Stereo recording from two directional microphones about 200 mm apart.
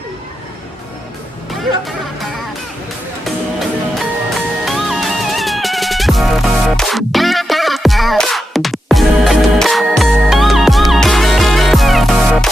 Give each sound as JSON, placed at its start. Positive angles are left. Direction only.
{"t": 3.9, "sound": "music", "side_deg": 0}